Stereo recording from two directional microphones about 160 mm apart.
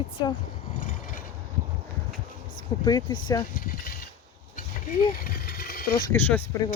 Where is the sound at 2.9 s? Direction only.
25° left (ahead or behind).